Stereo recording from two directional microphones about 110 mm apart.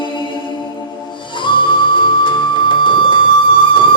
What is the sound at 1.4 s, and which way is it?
Music, 45° left (ahead or behind).